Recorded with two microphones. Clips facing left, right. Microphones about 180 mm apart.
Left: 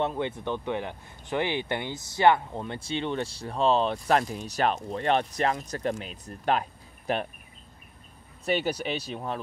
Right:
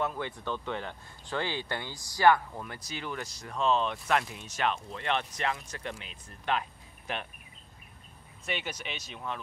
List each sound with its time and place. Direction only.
0.0 s speech: 25° left (ahead or behind); by 7.2 s 40° left (ahead or behind)
8.5 s speech: 35° left (ahead or behind)